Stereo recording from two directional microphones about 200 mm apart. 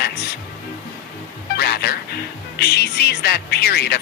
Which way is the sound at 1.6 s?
50° left (ahead or behind).